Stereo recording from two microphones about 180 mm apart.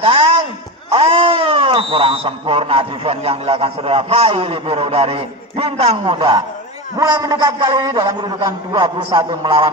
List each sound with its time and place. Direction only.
0.0 s a man's voice: 30° right (ahead or behind)